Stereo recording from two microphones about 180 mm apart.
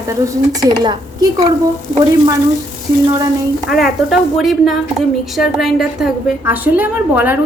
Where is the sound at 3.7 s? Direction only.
Centre (ahead or behind).